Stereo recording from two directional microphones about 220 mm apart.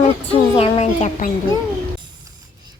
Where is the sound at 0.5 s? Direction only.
25° left (ahead or behind).